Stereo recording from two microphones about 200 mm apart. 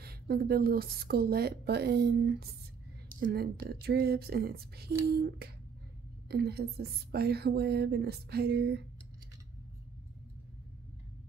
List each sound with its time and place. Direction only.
0.0 s speech: 50° right (ahead or behind)
6.2 s speech: 50° right (ahead or behind)